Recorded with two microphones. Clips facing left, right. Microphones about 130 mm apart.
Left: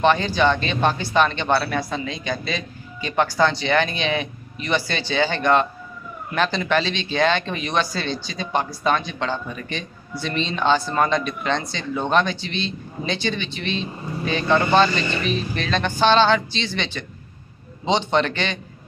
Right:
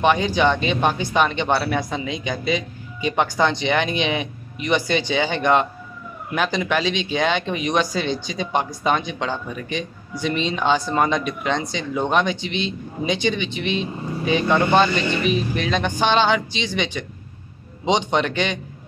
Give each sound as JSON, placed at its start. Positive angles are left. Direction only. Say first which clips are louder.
{"t": 0.0, "sound": "speech", "louder": "even", "side_deg": -15}